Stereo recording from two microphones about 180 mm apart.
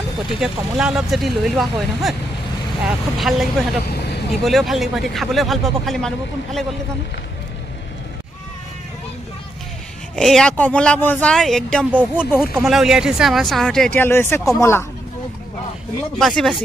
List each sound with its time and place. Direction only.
0.4 s speech: 5° right (ahead or behind)
3.9 s vehicle: 65° left (ahead or behind)
4.3 s speech: centre (ahead or behind)
10.1 s speech: 5° left (ahead or behind)
16.2 s speech: centre (ahead or behind)